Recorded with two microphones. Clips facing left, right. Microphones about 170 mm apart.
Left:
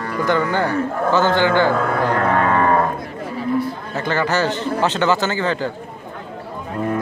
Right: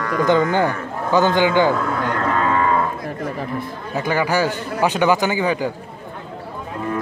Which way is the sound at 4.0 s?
10° right (ahead or behind).